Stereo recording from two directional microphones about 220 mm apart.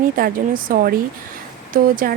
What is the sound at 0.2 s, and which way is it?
Speech, 40° right (ahead or behind).